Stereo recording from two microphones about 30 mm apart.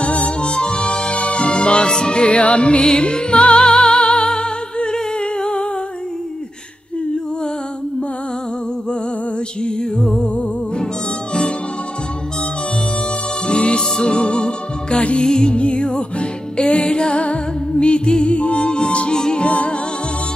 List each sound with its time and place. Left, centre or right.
0.0 s harmonica: left
0.4 s harmonica: left
1.2 s music: left
13.5 s music: left
15.5 s music: left
18.3 s music: left
19.1 s music: left
19.4 s music: left